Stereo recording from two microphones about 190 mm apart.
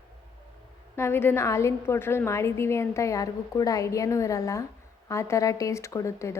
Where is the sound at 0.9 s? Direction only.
15° left (ahead or behind).